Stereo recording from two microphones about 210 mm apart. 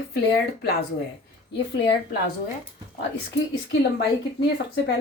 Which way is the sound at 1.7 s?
60° left (ahead or behind).